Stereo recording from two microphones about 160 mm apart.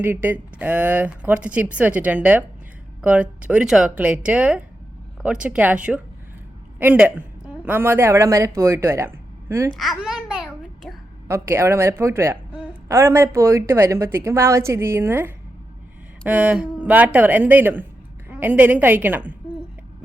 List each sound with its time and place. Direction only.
0.0 s a woman's voice: 10° right (ahead or behind)
9.7 s babbling: centre (ahead or behind)
11.3 s a woman's voice: 15° right (ahead or behind)